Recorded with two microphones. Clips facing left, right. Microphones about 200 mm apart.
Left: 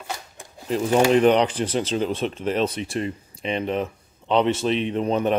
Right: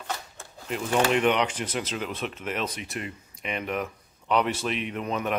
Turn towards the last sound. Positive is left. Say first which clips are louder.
# left 7 dB
turn(degrees=30)  # may be behind; listen again after turning